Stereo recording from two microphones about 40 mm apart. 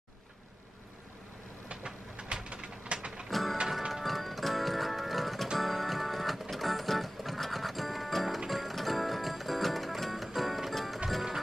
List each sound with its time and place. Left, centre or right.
2.2 s a sound: right
2.5 s train: right
3.3 s music: centre